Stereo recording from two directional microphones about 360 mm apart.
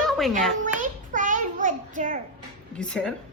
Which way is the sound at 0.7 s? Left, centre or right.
Right.